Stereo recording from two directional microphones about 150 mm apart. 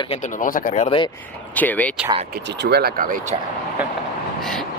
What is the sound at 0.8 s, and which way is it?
Speech, 35° left (ahead or behind).